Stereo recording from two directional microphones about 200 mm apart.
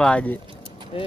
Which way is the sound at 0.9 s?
25° left (ahead or behind).